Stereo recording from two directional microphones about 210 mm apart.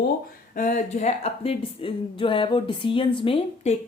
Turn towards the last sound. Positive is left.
turn(degrees=25)  # may be behind; listen again after turning